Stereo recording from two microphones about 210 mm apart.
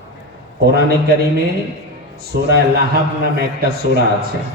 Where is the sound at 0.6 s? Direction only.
50° right (ahead or behind).